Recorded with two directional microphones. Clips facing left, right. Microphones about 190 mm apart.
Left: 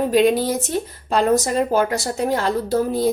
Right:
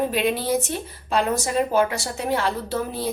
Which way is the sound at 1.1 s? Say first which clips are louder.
Left 5 dB; 40° left (ahead or behind).